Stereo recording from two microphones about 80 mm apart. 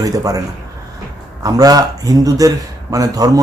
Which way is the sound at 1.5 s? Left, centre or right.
Right.